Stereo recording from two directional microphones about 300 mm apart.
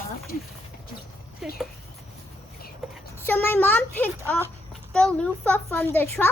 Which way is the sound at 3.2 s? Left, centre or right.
Centre.